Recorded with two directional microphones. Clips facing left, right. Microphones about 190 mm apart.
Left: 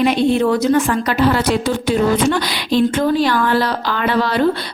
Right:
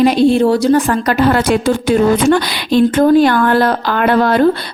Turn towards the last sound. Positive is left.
turn(degrees=-50)  # may be behind; listen again after turning